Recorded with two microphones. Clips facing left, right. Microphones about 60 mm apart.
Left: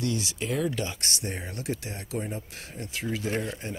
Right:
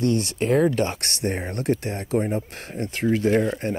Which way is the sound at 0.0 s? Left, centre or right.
Right.